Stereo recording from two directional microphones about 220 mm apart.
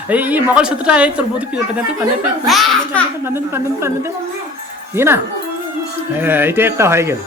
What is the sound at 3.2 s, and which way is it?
Speech, 10° right (ahead or behind).